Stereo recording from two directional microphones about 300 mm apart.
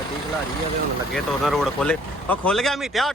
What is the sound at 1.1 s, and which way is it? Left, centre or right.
Speech, centre.